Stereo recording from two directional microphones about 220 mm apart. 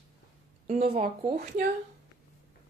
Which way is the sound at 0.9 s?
25° right (ahead or behind).